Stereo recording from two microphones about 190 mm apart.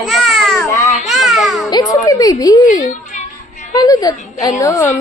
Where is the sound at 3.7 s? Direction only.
20° left (ahead or behind).